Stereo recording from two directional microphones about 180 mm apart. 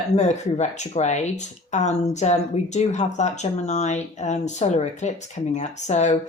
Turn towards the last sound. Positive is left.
turn(degrees=40)  # may be behind; listen again after turning